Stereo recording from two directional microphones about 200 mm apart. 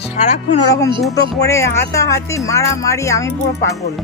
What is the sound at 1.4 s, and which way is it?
Speech, 15° left (ahead or behind).